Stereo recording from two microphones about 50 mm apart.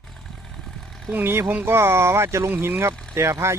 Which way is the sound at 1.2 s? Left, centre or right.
Right.